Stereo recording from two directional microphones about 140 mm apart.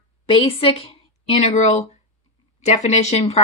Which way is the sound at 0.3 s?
40° left (ahead or behind).